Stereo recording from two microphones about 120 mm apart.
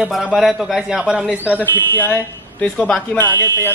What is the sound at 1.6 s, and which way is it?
Speech, 15° left (ahead or behind).